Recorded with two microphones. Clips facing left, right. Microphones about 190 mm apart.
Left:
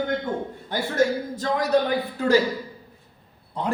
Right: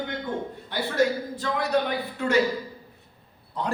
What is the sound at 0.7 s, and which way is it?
Speech, 45° left (ahead or behind).